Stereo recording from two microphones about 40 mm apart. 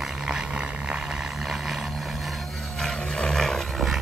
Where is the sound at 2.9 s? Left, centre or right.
Left.